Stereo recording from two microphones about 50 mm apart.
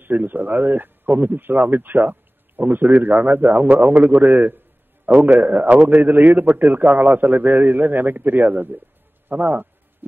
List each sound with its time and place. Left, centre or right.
0.0 s speech: right